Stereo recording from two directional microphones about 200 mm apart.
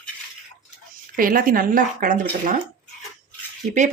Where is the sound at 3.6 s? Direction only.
40° right (ahead or behind).